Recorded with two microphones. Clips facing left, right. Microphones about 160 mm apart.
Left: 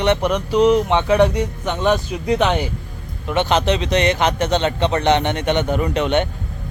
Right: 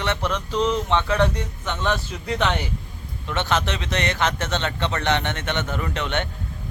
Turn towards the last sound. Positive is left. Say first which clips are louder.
# left 8 dB
turn(degrees=15)  # may be behind; listen again after turning